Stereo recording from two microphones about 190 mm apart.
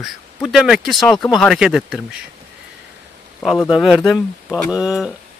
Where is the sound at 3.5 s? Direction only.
15° left (ahead or behind).